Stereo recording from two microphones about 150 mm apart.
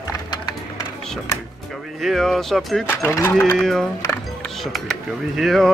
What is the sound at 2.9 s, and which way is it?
Speech, 15° left (ahead or behind).